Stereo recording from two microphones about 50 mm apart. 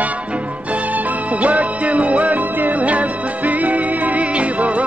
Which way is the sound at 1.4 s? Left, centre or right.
Right.